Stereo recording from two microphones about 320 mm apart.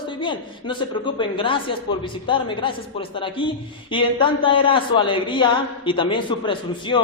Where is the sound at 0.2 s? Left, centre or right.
Centre.